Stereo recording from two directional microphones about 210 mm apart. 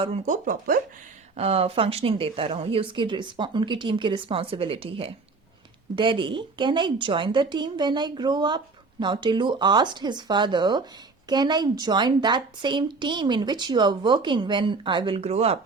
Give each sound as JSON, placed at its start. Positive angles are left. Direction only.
{"t": 0.0, "sound": "speech", "side_deg": -35}
{"t": 1.4, "sound": "a woman's voice", "side_deg": -30}